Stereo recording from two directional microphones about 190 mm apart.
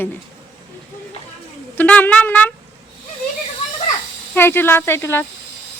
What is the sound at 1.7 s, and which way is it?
Speech, 10° left (ahead or behind).